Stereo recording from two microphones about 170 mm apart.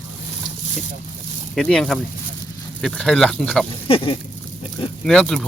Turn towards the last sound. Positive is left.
turn(degrees=5)  # may be behind; listen again after turning